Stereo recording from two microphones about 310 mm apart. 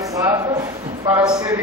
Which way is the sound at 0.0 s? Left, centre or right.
Centre.